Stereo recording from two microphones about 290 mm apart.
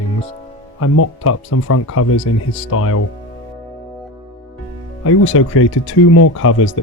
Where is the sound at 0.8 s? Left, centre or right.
Left.